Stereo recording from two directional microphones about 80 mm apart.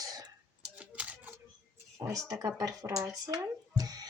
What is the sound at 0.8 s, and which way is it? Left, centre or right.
Typewriter, centre.